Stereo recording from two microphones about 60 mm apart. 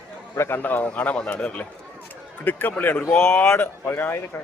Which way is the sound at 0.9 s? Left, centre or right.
Left.